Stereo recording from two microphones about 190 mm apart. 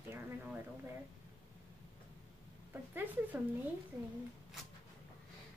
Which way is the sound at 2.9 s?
10° right (ahead or behind).